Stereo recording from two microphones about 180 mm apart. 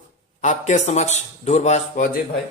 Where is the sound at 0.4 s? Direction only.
40° left (ahead or behind).